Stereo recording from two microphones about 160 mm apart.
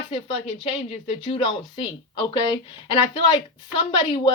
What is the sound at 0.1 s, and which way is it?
Speech, 30° left (ahead or behind).